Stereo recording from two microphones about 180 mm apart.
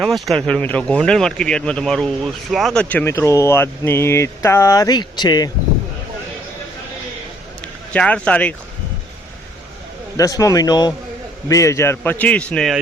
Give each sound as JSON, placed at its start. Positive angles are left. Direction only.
{"t": 0.0, "sound": "speech", "side_deg": 0}
{"t": 7.9, "sound": "speech", "side_deg": 5}
{"t": 10.2, "sound": "a man's voice", "side_deg": 20}